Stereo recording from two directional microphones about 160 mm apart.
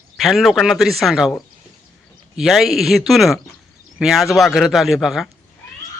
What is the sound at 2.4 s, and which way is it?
Speech, centre (ahead or behind).